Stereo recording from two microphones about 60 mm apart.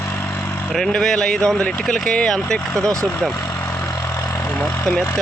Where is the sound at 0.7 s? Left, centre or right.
Centre.